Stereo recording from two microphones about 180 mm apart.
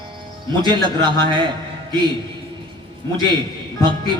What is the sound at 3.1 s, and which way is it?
Speech, 25° right (ahead or behind).